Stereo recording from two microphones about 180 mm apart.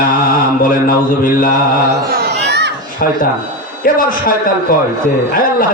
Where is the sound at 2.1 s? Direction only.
65° right (ahead or behind).